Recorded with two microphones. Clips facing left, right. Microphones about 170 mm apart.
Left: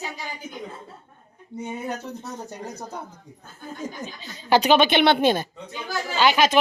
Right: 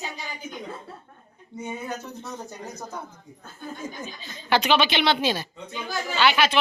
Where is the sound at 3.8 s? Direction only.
40° left (ahead or behind); by 5.4 s 55° left (ahead or behind).